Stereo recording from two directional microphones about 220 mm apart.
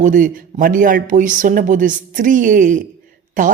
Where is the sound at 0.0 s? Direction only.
35° right (ahead or behind).